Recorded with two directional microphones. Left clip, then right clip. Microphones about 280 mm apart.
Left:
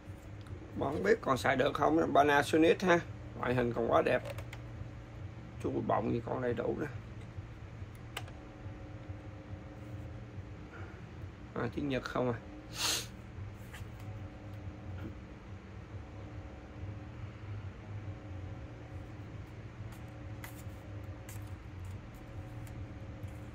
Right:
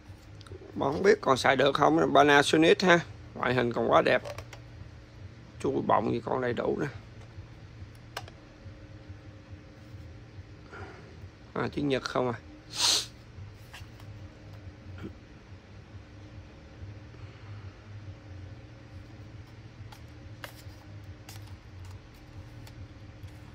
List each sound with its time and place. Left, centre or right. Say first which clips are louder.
0.7 s speech: right 6 dB; right
5.6 s speech: right 7 dB; right
11.5 s speech: right 6 dB; right